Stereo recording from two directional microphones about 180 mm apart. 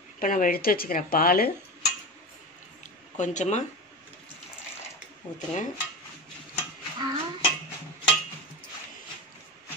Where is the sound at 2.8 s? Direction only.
40° left (ahead or behind).